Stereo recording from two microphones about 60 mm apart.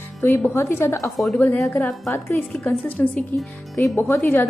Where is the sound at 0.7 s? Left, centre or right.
Left.